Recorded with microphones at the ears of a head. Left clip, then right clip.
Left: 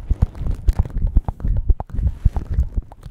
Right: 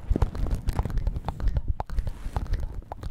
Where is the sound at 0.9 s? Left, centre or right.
Left.